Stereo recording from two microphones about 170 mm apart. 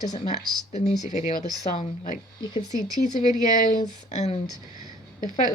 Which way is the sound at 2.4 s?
25° left (ahead or behind).